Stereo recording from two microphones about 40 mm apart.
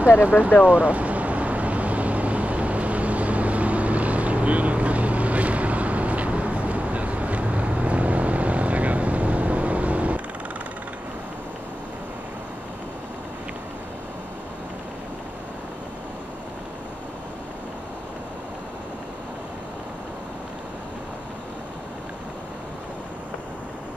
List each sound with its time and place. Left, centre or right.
0.2 s vehicle: right